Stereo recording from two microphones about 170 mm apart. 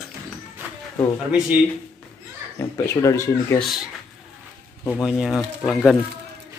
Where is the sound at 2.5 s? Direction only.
15° left (ahead or behind).